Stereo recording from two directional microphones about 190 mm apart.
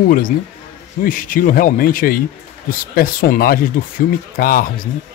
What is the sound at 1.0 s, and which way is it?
Speech, 45° left (ahead or behind).